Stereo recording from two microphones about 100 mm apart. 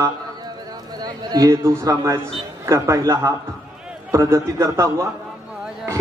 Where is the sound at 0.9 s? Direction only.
45° right (ahead or behind).